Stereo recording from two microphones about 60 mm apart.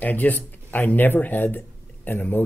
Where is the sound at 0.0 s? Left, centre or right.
Left.